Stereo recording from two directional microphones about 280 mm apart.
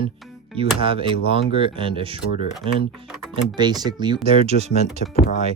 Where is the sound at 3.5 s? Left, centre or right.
Centre.